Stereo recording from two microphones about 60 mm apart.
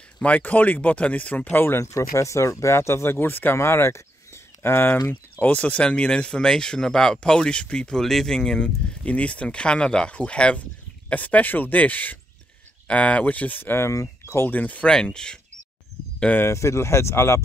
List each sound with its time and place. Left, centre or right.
0.2 s speech: left
1.8 s speech: left
3.5 s a sound: left
5.4 s speech: left
13.7 s speech: left
14.5 s speech: left
14.9 s speech: centre
16.3 s speech: left